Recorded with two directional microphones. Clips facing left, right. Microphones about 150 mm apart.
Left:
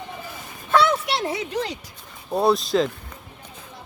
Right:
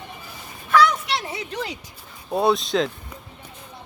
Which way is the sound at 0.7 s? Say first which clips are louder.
Right 1 dB; 25° left (ahead or behind).